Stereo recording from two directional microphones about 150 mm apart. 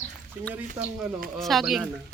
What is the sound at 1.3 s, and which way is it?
Speech, centre (ahead or behind).